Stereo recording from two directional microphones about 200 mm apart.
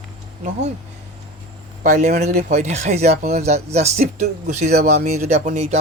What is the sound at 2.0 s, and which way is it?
Speech, 35° right (ahead or behind).